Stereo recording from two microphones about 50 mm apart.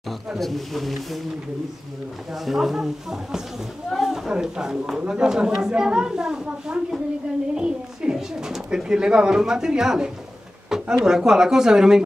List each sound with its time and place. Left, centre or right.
0.4 s speech: centre
2.3 s speech: centre
3.9 s a sound: centre
4.3 s speech: centre